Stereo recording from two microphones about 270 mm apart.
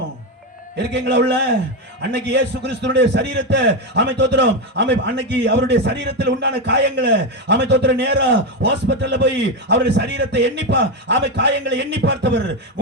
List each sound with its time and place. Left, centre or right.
0.8 s a man's voice: right